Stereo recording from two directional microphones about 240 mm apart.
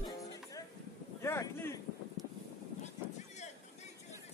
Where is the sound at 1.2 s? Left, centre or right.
Centre.